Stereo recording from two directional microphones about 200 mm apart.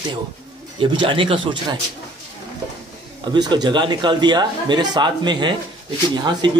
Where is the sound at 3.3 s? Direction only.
20° right (ahead or behind).